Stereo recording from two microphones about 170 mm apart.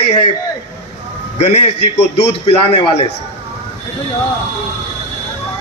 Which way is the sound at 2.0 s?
80° left.